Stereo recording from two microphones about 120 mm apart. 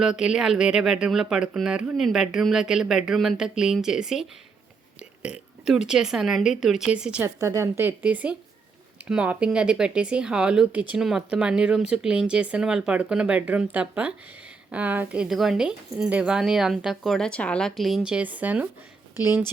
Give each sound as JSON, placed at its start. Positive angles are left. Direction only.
{"t": 0.0, "sound": "speech", "side_deg": -5}
{"t": 7.2, "sound": "speech", "side_deg": -25}